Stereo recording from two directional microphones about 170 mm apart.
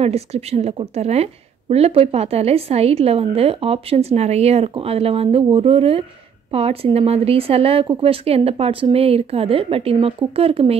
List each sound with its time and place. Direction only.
0.0 s a woman's voice: 35° right (ahead or behind)